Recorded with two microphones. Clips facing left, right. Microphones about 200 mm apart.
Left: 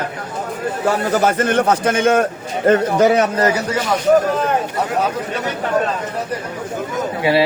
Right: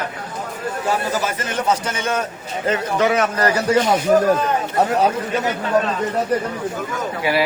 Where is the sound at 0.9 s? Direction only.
55° left (ahead or behind).